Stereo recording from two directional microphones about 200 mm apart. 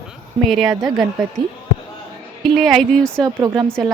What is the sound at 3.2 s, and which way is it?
Speech, 15° right (ahead or behind).